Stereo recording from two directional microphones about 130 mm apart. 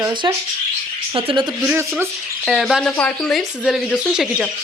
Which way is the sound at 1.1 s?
45° right (ahead or behind).